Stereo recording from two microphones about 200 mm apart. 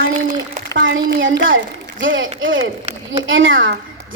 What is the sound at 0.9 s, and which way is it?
A woman's voice, 70° right (ahead or behind).